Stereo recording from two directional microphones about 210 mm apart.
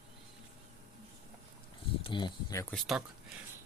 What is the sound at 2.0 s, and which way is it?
Speech, 20° left (ahead or behind).